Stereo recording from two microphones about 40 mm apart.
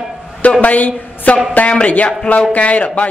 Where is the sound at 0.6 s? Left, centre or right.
Left.